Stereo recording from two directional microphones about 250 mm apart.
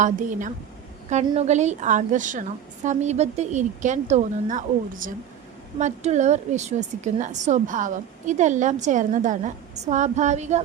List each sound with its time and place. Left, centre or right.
0.0 s a woman's voice: right
5.8 s a woman's voice: right